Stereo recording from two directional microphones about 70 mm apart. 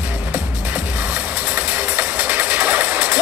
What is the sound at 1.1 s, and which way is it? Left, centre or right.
Music, right.